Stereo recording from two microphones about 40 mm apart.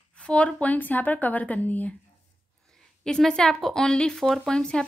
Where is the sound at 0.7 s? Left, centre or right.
Left.